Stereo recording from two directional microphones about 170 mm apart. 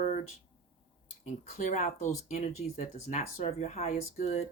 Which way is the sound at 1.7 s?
50° left (ahead or behind).